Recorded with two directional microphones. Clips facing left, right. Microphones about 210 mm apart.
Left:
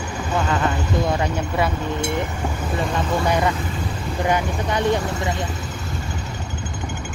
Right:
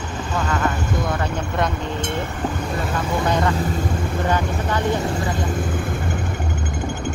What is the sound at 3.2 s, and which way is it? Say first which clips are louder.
Speech: right 1 dB; 10° left (ahead or behind).